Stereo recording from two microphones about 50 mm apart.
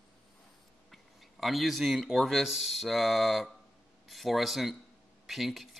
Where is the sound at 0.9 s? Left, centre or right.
Centre.